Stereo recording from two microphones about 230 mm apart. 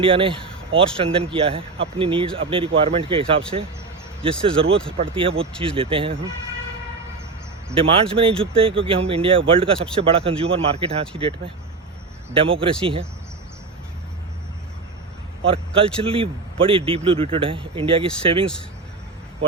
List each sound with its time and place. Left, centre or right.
0.0 s a man's voice: right
8.1 s a man's voice: right
15.4 s a man's voice: right